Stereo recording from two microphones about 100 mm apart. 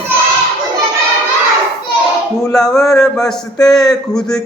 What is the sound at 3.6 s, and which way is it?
Speech, 40° left (ahead or behind).